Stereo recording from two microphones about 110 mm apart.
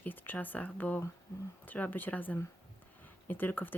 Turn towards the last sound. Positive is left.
turn(degrees=15)  # may be behind; listen again after turning